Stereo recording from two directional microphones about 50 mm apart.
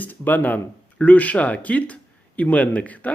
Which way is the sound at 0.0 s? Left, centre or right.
Left.